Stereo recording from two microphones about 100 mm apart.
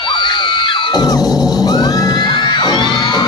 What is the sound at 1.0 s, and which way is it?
Music, 40° left (ahead or behind).